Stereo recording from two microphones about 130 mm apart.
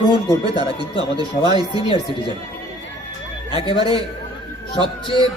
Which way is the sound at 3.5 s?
45° left (ahead or behind).